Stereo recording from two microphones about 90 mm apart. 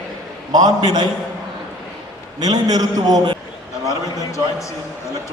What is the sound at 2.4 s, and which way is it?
Speech, 45° right (ahead or behind).